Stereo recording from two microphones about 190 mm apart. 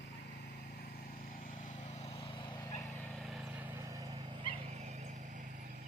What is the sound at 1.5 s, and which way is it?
Vehicle, 40° left (ahead or behind).